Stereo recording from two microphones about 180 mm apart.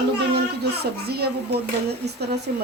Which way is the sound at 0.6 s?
60° right (ahead or behind).